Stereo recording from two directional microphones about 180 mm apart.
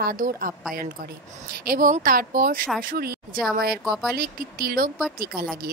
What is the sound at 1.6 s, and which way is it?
Speech, 50° right (ahead or behind).